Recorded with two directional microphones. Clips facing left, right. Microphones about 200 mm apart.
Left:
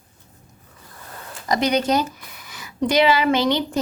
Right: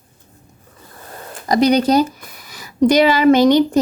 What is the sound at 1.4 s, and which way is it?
Speech, 35° right (ahead or behind).